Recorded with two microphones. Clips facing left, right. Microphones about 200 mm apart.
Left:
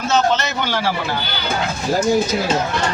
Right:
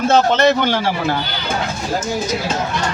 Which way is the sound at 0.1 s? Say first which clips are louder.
Right 4 dB; 55° right (ahead or behind).